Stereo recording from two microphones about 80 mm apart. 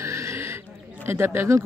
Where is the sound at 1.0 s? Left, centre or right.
Right.